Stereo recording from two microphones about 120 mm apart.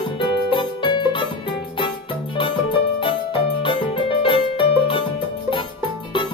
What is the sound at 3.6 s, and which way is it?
Music, 40° left (ahead or behind).